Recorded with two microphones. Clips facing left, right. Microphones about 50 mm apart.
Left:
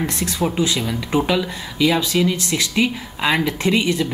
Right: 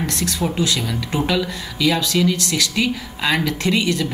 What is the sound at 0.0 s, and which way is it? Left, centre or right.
Speech, left.